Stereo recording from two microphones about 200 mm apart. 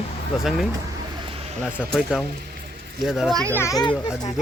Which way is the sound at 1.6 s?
5° right (ahead or behind).